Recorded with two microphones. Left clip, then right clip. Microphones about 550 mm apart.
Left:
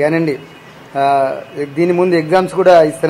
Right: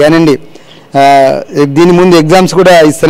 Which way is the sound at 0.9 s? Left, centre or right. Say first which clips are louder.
Right 9 dB; right.